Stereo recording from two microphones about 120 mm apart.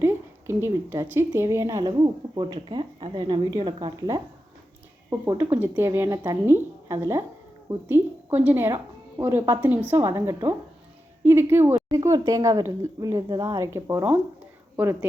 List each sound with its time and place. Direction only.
0.0 s a woman's voice: 20° right (ahead or behind)
5.4 s a woman's voice: 15° right (ahead or behind)